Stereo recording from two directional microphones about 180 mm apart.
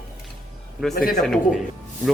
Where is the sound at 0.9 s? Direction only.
60° left (ahead or behind).